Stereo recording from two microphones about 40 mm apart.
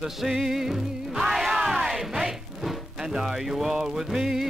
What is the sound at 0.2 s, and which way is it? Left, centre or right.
Music, centre.